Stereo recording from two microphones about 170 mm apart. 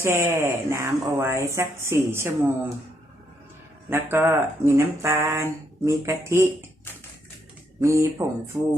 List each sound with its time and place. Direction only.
0.0 s speech: 15° right (ahead or behind)
3.8 s speech: 15° right (ahead or behind)
7.8 s speech: 15° right (ahead or behind)